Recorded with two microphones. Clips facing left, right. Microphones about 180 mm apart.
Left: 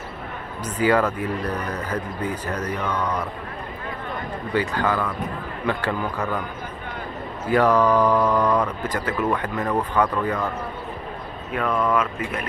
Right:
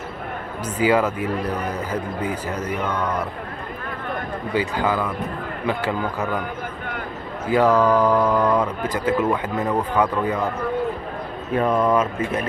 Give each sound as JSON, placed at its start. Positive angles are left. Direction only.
{"t": 0.8, "sound": "speech", "side_deg": -10}
{"t": 2.7, "sound": "speech", "side_deg": -10}
{"t": 4.6, "sound": "speech", "side_deg": -10}
{"t": 7.4, "sound": "speech", "side_deg": -10}
{"t": 11.5, "sound": "speech", "side_deg": -20}